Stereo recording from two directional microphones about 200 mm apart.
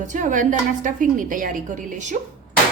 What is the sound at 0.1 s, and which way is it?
A woman's voice, 40° right (ahead or behind).